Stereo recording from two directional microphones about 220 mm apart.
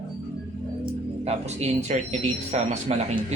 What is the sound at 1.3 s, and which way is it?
Speech, 30° right (ahead or behind).